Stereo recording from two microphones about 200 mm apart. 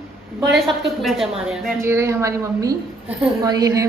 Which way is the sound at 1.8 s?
15° right (ahead or behind).